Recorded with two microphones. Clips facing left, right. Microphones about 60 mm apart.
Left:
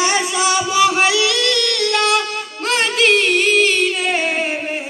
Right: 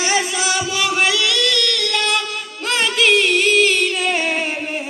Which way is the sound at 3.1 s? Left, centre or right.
Centre.